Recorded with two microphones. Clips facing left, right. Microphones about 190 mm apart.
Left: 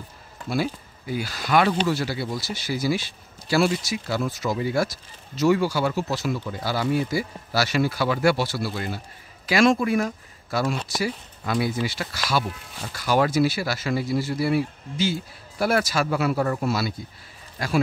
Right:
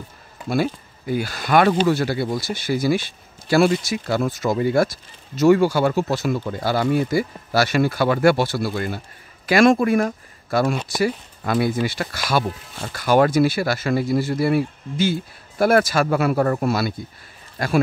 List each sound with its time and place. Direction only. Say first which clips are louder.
0.5 s speech: right 4 dB; 55° right (ahead or behind)